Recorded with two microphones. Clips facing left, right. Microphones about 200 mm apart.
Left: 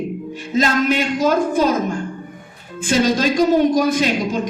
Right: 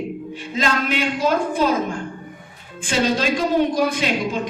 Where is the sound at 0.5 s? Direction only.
45° left (ahead or behind).